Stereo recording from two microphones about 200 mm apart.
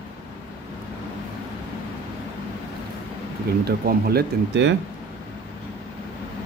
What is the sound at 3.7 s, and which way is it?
Speech, 50° right (ahead or behind).